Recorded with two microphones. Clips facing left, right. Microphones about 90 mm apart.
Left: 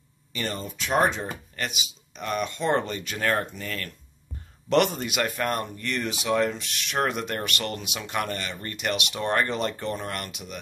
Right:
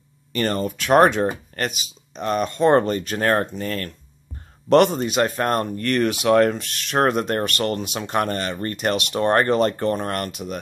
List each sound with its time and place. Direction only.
0.3 s speech: 55° right (ahead or behind)
1.5 s speech: 45° right (ahead or behind)
5.8 s speech: 55° right (ahead or behind)